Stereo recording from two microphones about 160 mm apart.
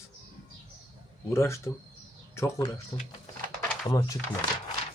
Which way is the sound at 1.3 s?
15° left (ahead or behind).